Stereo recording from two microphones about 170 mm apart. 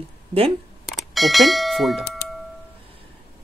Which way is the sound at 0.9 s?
Centre (ahead or behind).